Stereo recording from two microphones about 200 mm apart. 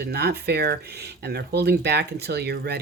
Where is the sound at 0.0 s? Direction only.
55° right (ahead or behind).